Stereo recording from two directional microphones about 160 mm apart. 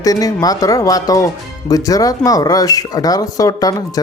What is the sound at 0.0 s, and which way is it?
Speech, 20° left (ahead or behind).